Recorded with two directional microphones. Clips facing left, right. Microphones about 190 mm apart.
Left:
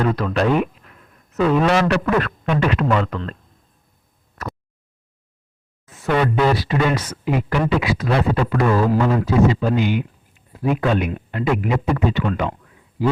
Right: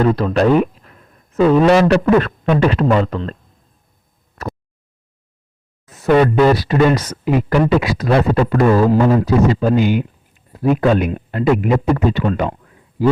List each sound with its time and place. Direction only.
0.0 s speech: 30° right (ahead or behind)
5.9 s a man's voice: 40° right (ahead or behind)